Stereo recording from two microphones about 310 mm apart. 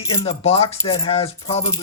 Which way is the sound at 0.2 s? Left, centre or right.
Centre.